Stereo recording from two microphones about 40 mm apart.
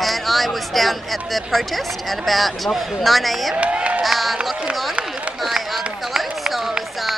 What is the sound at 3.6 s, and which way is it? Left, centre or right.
Crowd, right.